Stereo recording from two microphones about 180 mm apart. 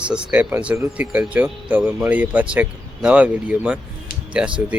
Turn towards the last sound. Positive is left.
turn(degrees=-5)  # may be behind; listen again after turning